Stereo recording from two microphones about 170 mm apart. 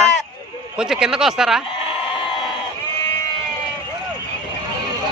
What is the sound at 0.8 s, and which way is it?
Speech, 5° right (ahead or behind).